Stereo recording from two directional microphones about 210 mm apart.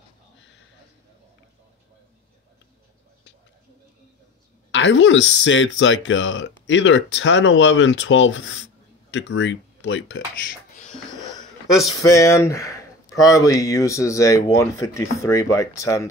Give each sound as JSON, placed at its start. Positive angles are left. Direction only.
{"t": 4.6, "sound": "speech", "side_deg": 60}
{"t": 12.0, "sound": "speech", "side_deg": 15}